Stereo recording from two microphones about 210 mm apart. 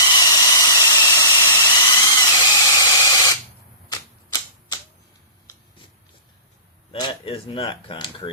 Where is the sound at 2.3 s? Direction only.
20° left (ahead or behind).